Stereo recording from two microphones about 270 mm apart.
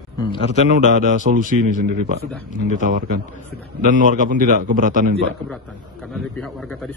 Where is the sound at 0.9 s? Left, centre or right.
Right.